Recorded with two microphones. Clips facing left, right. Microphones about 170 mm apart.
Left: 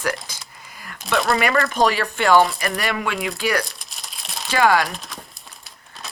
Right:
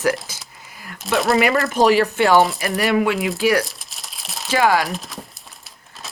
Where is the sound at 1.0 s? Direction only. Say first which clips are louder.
Right 3 dB; centre (ahead or behind).